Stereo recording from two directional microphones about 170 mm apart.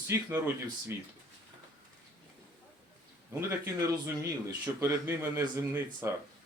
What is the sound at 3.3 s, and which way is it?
Speech, 15° right (ahead or behind).